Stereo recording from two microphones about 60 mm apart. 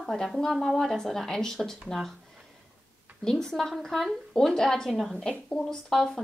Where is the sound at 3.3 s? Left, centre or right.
Centre.